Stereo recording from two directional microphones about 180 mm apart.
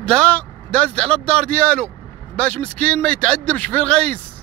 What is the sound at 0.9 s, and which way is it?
Speech, 35° right (ahead or behind).